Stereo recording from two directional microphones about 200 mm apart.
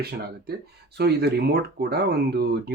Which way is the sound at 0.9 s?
55° right (ahead or behind).